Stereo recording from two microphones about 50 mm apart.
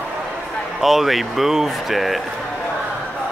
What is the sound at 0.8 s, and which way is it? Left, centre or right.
Speech, centre.